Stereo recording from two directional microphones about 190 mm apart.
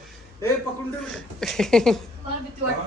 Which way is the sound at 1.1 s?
Centre (ahead or behind).